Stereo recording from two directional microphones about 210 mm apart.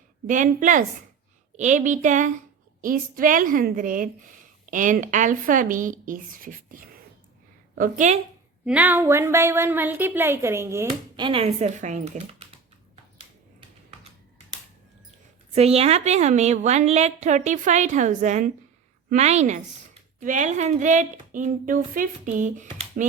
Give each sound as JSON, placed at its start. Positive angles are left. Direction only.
{"t": 0.3, "sound": "a woman's voice", "side_deg": -40}
{"t": 8.6, "sound": "a woman's voice", "side_deg": -5}
{"t": 11.3, "sound": "a woman's voice", "side_deg": -25}
{"t": 15.5, "sound": "a woman's voice", "side_deg": -30}